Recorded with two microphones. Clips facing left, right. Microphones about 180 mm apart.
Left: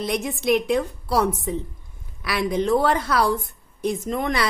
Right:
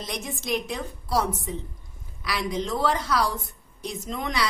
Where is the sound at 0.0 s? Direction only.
60° left (ahead or behind).